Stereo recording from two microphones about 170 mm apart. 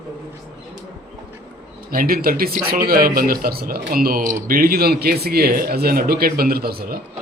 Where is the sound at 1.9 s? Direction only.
60° right (ahead or behind).